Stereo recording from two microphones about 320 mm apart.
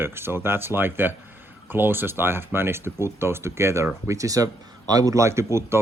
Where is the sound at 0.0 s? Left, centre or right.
Centre.